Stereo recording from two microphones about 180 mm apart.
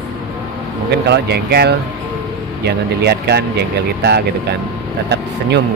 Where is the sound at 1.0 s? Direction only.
65° right (ahead or behind).